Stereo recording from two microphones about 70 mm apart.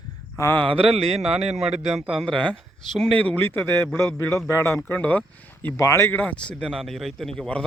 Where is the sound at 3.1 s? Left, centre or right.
Left.